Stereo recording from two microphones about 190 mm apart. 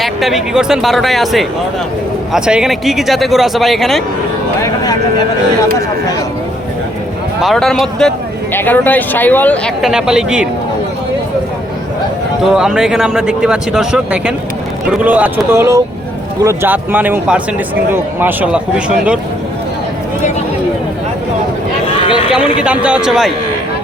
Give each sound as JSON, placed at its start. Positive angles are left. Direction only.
{"t": 0.0, "sound": "speech", "side_deg": 0}
{"t": 4.6, "sound": "speech", "side_deg": 20}
{"t": 7.4, "sound": "speech", "side_deg": 0}
{"t": 12.4, "sound": "speech", "side_deg": -5}
{"t": 21.9, "sound": "a sound", "side_deg": 25}
{"t": 22.6, "sound": "speech", "side_deg": -5}